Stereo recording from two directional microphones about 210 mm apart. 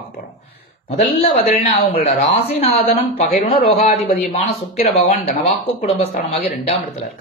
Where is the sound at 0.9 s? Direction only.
30° left (ahead or behind).